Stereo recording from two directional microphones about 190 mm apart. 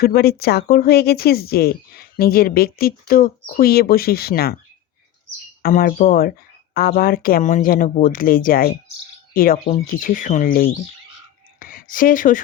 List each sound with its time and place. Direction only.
0.0 s speech: 55° left (ahead or behind)
5.6 s speech: 50° left (ahead or behind)
11.6 s a sound: 45° left (ahead or behind)